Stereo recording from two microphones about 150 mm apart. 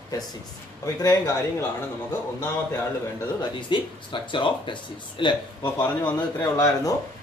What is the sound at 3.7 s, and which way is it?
Speech, 35° left (ahead or behind).